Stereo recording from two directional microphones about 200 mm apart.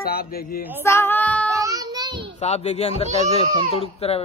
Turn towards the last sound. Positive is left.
turn(degrees=30)  # may be behind; listen again after turning